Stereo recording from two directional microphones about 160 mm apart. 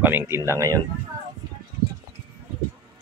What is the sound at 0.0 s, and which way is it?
Speech, 15° right (ahead or behind).